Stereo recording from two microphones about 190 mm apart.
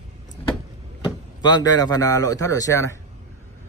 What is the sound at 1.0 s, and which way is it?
Speech, 20° left (ahead or behind).